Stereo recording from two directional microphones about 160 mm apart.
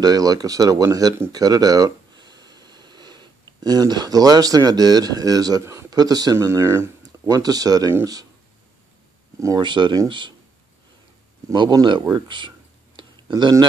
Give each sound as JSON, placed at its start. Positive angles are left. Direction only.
{"t": 0.0, "sound": "speech", "side_deg": -25}
{"t": 9.4, "sound": "speech", "side_deg": -25}
{"t": 11.5, "sound": "speech", "side_deg": -30}